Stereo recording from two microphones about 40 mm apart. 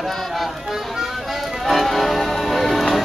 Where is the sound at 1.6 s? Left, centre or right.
Centre.